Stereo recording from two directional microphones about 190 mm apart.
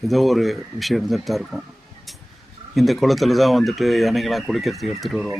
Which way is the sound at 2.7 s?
Centre (ahead or behind).